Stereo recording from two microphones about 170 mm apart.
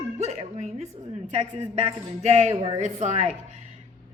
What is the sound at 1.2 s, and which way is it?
A man's voice, 45° right (ahead or behind).